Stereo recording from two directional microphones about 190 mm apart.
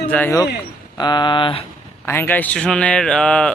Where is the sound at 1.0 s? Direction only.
20° left (ahead or behind).